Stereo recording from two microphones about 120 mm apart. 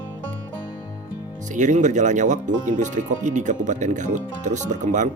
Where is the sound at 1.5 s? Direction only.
90° right.